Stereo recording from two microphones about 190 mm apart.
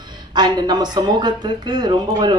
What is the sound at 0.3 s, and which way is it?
Speech, 20° right (ahead or behind).